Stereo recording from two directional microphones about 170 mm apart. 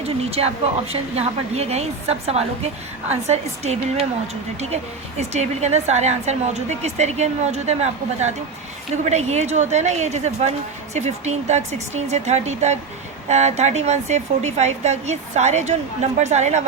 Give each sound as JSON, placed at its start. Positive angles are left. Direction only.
{"t": 0.0, "sound": "a woman's voice", "side_deg": -35}